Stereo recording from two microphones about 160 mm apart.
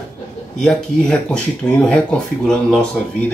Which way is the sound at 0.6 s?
5° left (ahead or behind).